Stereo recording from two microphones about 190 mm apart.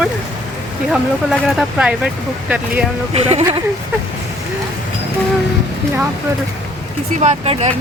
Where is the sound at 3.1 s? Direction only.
35° right (ahead or behind).